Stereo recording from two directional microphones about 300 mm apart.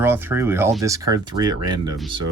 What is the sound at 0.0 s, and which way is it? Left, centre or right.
Speech, centre.